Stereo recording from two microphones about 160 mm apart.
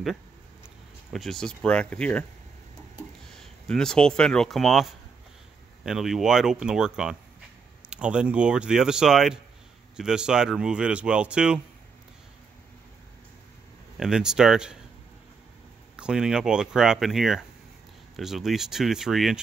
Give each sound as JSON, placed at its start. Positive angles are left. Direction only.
{"t": 1.1, "sound": "speech", "side_deg": 0}
{"t": 3.3, "sound": "speech", "side_deg": 5}
{"t": 5.9, "sound": "speech", "side_deg": 0}
{"t": 13.9, "sound": "speech", "side_deg": -5}
{"t": 16.0, "sound": "speech", "side_deg": -5}